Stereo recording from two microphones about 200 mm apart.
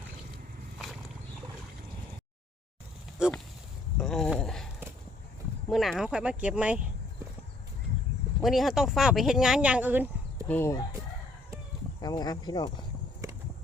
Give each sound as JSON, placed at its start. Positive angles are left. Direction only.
{"t": 3.2, "sound": "speech", "side_deg": -5}
{"t": 8.4, "sound": "speech", "side_deg": 0}
{"t": 10.5, "sound": "chicken", "side_deg": 15}
{"t": 11.9, "sound": "speech", "side_deg": 20}